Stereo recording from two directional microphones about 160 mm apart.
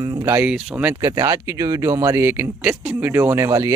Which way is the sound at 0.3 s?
10° right (ahead or behind).